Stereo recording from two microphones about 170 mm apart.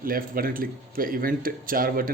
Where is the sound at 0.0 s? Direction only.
60° right (ahead or behind).